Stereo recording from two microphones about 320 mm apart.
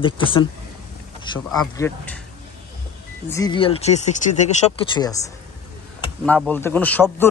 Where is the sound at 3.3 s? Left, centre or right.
Centre.